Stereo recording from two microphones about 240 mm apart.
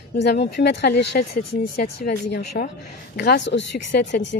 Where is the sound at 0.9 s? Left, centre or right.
Left.